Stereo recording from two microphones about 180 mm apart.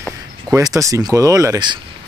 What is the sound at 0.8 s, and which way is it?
Speech, 20° right (ahead or behind).